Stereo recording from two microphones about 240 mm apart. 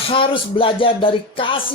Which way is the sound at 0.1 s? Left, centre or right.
Left.